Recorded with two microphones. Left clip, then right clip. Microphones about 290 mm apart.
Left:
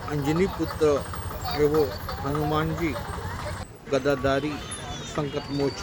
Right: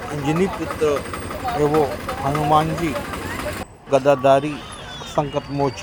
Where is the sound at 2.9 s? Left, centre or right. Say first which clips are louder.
Right 7 dB; right.